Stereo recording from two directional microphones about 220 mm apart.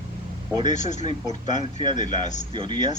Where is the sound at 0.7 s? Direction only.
35° left (ahead or behind).